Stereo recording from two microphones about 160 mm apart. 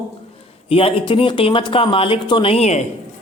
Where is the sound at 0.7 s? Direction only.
35° left (ahead or behind).